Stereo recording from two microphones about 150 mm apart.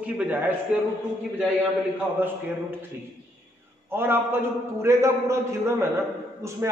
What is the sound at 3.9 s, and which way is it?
A man's voice, 15° right (ahead or behind).